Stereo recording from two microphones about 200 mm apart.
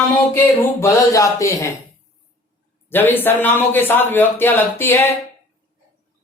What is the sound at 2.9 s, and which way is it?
A man's voice, 10° left (ahead or behind).